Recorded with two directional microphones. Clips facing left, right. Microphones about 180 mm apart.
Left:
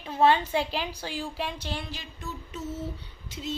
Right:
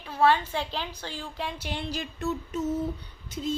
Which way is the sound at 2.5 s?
45° right (ahead or behind).